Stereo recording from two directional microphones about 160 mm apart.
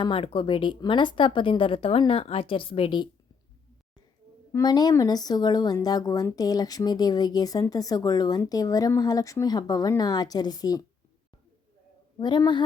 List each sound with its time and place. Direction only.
0.0 s a woman's voice: 35° left (ahead or behind)
4.5 s speech: 25° left (ahead or behind)
12.2 s speech: 30° left (ahead or behind)